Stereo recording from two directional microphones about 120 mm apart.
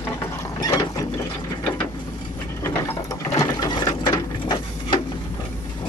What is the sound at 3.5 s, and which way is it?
Ratchet, 35° left (ahead or behind).